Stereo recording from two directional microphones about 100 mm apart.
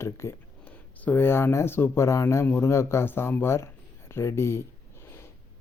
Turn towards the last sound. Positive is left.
turn(degrees=25)  # may be behind; listen again after turning